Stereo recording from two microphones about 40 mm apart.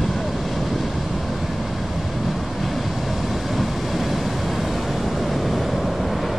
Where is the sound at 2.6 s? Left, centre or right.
Centre.